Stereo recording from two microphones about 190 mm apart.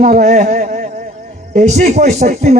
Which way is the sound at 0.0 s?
40° right (ahead or behind).